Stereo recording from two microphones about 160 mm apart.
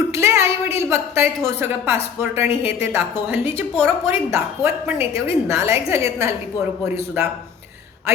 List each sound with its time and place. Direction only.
0.1 s a woman's voice: 15° right (ahead or behind)